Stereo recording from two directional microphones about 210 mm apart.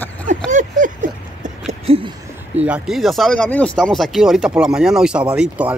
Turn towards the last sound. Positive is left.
turn(degrees=-5)  # may be behind; listen again after turning